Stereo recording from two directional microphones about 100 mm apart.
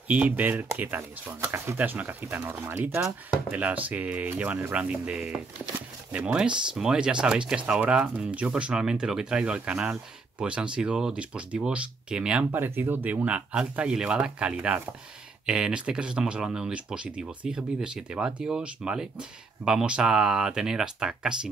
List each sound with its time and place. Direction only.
0.1 s speech: 15° right (ahead or behind)
12.4 s speech: 20° right (ahead or behind)